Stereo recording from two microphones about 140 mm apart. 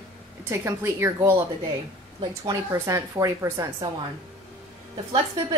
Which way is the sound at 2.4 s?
25° right (ahead or behind).